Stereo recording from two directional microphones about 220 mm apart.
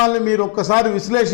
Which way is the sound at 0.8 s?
10° left (ahead or behind).